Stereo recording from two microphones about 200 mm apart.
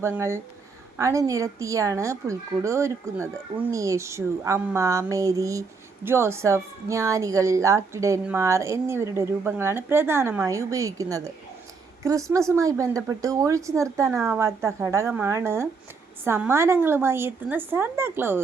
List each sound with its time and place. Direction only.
0.0 s a woman's voice: 15° right (ahead or behind)